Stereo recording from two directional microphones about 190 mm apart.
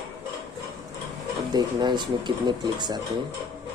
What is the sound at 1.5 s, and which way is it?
Speech, 25° right (ahead or behind).